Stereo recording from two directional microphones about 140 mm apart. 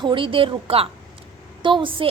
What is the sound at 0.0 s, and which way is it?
A woman's voice, 35° right (ahead or behind).